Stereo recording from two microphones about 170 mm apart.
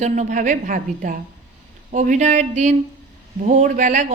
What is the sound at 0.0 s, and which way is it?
A woman's voice, 45° right (ahead or behind).